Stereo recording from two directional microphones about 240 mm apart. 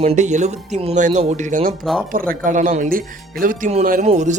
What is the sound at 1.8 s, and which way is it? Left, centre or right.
Speech, centre.